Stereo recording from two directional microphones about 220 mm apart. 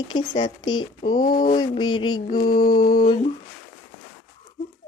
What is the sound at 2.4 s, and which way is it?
Mantra, 20° left (ahead or behind).